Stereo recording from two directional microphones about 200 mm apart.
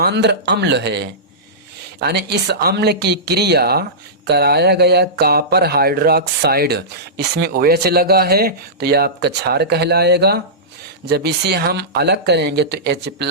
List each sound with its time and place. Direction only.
0.0 s speech: 55° right (ahead or behind)